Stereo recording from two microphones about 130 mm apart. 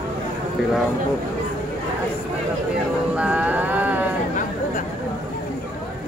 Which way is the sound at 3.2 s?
10° right (ahead or behind).